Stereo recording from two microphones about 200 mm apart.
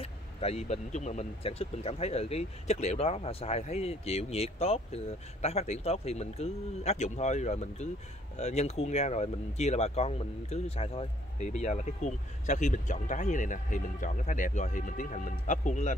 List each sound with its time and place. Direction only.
0.0 s speech: 30° left (ahead or behind)